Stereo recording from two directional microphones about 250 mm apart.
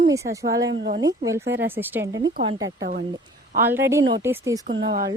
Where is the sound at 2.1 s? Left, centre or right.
Right.